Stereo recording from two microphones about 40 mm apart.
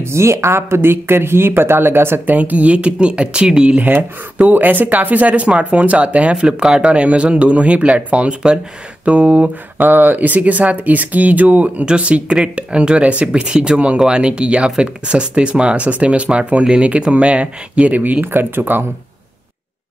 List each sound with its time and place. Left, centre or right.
0.0 s speech: right
2.2 s speech: right
4.4 s speech: right
6.6 s speech: centre
6.9 s speech: right
9.8 s speech: right
12.1 s speech: right
18.2 s speech: right